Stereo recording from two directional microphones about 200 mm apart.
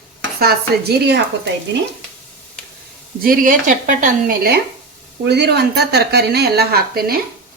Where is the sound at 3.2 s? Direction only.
45° right (ahead or behind).